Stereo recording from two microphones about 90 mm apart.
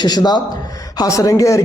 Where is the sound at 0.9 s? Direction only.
40° left (ahead or behind).